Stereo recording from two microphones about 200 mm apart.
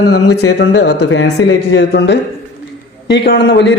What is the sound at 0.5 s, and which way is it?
A man's voice, 60° left (ahead or behind).